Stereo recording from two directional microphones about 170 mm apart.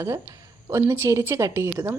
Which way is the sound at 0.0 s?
15° right (ahead or behind).